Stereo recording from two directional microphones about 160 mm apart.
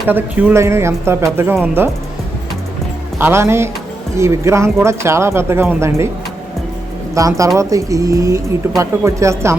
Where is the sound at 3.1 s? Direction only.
15° right (ahead or behind).